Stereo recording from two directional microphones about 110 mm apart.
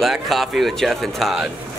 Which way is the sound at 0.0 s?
Centre (ahead or behind).